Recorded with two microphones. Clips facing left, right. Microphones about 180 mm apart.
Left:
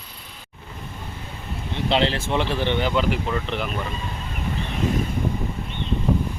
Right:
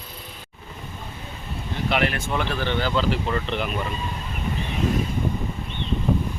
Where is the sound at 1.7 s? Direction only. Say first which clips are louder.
Left 2 dB; 25° left (ahead or behind).